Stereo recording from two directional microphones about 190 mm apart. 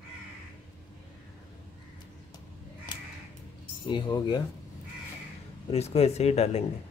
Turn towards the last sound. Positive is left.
turn(degrees=35)  # may be behind; listen again after turning